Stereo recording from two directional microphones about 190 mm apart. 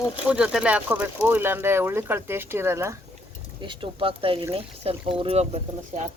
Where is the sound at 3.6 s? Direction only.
25° right (ahead or behind).